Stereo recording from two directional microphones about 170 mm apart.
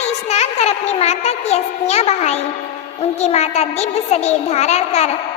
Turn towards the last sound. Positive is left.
turn(degrees=40)  # may be behind; listen again after turning